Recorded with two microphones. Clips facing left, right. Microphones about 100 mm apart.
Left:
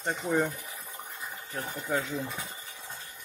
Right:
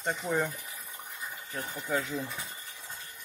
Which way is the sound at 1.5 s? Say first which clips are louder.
Left 1 dB; 20° left (ahead or behind).